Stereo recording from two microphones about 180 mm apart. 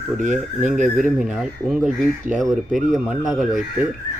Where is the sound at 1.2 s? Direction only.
5° right (ahead or behind).